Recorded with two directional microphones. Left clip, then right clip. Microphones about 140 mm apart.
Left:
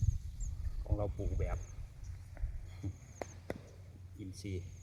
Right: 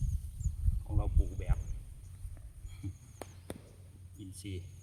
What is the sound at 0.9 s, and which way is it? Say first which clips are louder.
Speech: left 4 dB; 35° right (ahead or behind).